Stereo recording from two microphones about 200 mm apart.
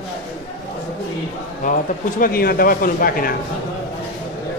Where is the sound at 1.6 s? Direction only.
40° left (ahead or behind).